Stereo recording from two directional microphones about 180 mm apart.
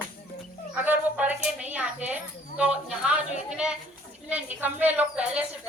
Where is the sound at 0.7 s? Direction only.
10° right (ahead or behind).